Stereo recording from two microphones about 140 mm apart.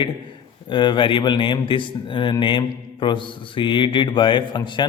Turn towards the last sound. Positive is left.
turn(degrees=35)  # may be behind; listen again after turning